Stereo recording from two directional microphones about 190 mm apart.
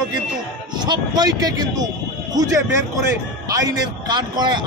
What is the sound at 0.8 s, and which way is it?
A man's voice, 20° right (ahead or behind).